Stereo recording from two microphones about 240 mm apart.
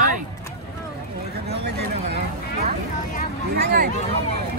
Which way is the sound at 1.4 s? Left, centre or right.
Right.